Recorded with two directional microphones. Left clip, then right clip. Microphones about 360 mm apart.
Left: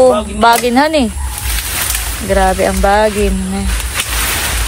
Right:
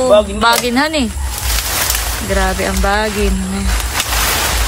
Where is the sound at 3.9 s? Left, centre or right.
Centre.